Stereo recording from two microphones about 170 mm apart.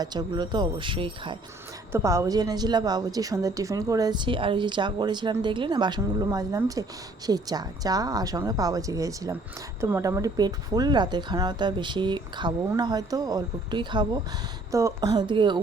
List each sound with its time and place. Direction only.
0.0 s speech: 25° right (ahead or behind)
1.9 s speech: 15° right (ahead or behind)